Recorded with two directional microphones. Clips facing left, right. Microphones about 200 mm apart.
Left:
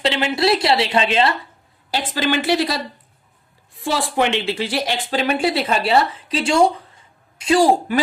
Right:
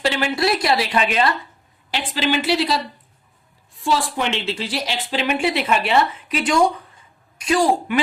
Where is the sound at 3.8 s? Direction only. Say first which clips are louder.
Left 2 dB; 65° left (ahead or behind).